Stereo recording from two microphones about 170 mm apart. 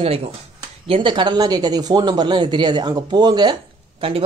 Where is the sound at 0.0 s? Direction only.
35° right (ahead or behind).